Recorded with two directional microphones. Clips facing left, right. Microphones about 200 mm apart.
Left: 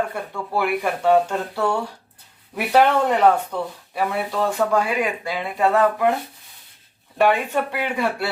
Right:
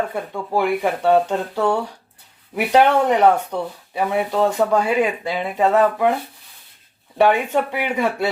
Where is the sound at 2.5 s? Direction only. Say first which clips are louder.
Right 2 dB; 15° right (ahead or behind).